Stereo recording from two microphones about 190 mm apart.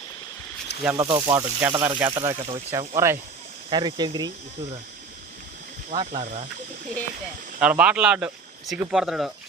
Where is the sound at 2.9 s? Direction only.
15° right (ahead or behind).